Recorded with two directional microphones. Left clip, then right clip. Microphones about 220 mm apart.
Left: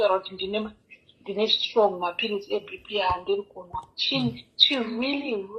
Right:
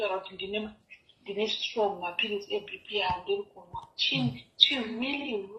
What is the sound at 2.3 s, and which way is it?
A woman's voice, 45° left (ahead or behind).